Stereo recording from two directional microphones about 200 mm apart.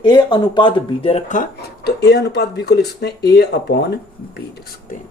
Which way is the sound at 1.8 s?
55° left (ahead or behind).